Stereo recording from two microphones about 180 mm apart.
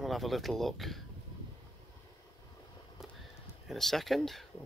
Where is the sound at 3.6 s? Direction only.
Centre (ahead or behind).